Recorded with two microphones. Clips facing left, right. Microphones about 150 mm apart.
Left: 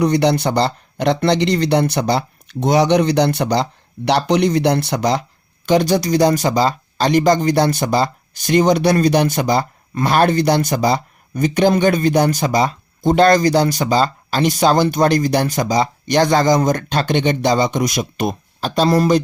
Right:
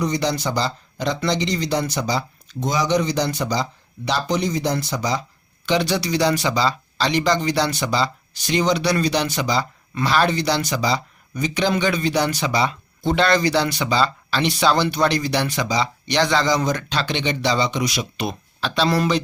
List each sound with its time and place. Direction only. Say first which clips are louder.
0.0 s speech: left 7 dB; 65° left (ahead or behind)
5.6 s speech: left 6 dB; 45° left (ahead or behind)